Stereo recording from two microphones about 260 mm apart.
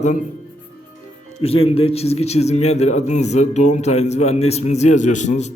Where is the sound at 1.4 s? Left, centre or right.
Left.